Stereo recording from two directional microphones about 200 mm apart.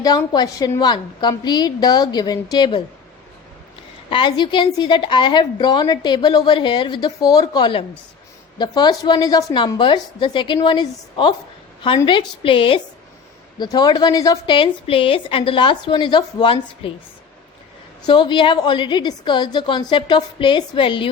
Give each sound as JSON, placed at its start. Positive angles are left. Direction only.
{"t": 0.0, "sound": "a woman's voice", "side_deg": 20}
{"t": 4.1, "sound": "a woman's voice", "side_deg": 25}
{"t": 18.0, "sound": "a woman's voice", "side_deg": 25}